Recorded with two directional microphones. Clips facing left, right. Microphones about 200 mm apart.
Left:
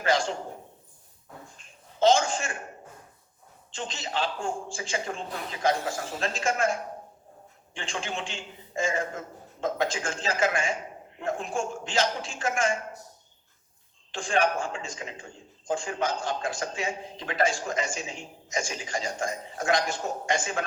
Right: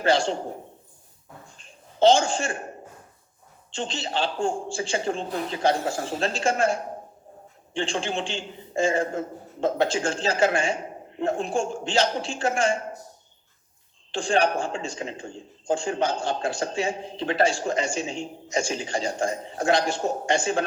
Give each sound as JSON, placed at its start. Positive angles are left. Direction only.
{"t": 0.0, "sound": "a man's voice", "side_deg": -30}
{"t": 1.5, "sound": "a sound", "side_deg": -30}
{"t": 3.7, "sound": "a man's voice", "side_deg": -30}
{"t": 14.1, "sound": "a man's voice", "side_deg": -30}